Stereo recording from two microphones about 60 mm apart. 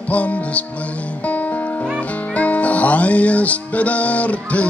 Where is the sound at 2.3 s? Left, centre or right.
Left.